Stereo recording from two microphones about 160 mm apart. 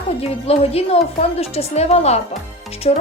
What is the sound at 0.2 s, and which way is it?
Speech, 40° left (ahead or behind).